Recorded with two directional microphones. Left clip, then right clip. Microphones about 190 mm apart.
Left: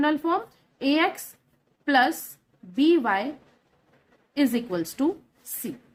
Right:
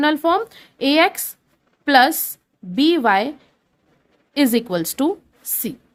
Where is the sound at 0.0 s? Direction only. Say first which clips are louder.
Right 7 dB; 55° right (ahead or behind).